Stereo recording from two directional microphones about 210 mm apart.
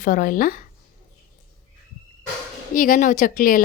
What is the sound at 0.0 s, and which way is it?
Speech, 40° left (ahead or behind).